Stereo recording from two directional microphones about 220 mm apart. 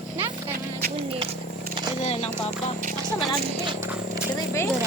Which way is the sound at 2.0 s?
30° left (ahead or behind).